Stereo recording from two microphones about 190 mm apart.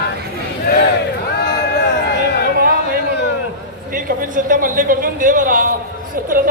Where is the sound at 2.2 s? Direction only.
60° left (ahead or behind).